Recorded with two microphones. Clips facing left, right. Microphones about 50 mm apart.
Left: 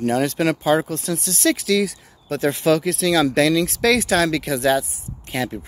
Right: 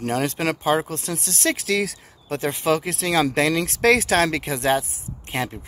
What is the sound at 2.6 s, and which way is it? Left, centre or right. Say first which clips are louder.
Speech: left 4 dB; right.